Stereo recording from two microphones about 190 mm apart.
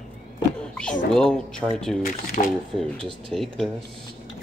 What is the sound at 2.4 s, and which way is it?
Speech, 35° left (ahead or behind).